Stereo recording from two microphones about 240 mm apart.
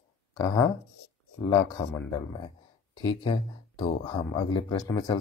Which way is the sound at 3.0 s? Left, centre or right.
Centre.